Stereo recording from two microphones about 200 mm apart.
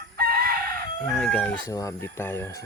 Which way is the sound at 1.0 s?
5° left (ahead or behind).